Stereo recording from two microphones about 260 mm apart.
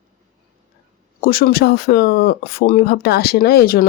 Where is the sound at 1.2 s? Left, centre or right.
Left.